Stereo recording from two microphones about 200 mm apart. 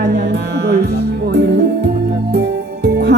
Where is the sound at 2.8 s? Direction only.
55° right (ahead or behind).